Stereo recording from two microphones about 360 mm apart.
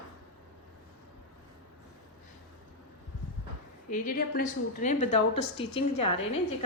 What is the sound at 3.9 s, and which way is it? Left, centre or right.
A woman's voice, left.